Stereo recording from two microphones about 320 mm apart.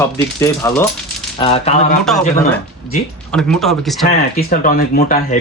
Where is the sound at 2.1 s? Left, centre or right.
Centre.